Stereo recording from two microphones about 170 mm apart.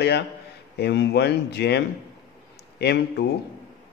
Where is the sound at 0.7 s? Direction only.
80° left.